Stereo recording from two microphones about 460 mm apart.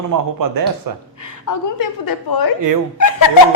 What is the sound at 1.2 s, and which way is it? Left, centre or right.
A woman's voice, left.